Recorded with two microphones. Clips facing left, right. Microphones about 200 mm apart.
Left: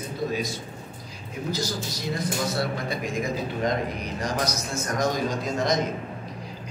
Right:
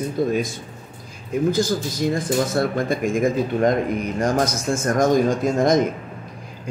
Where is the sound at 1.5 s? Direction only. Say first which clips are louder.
Right 9 dB; 50° right (ahead or behind).